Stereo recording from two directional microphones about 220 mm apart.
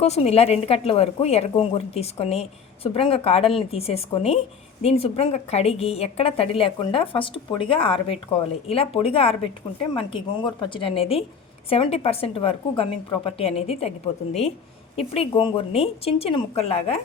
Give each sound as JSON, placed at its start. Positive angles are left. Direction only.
{"t": 0.0, "sound": "a woman's voice", "side_deg": 30}